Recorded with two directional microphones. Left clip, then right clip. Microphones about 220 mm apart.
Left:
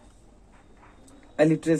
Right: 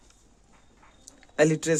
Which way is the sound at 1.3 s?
45° right (ahead or behind).